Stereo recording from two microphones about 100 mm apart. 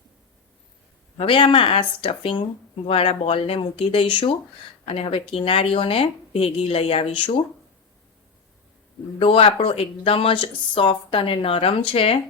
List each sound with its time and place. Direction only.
1.1 s speech: 55° left (ahead or behind)
2.8 s speech: 75° left (ahead or behind)
9.1 s speech: 65° left (ahead or behind)